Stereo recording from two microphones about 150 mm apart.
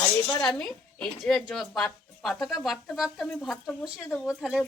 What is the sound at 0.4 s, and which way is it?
Speech, 5° left (ahead or behind).